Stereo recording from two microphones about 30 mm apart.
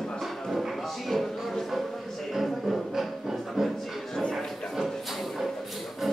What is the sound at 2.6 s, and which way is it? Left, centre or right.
Music, centre.